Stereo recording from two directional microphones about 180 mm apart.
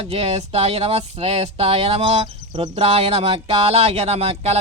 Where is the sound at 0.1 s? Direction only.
35° right (ahead or behind).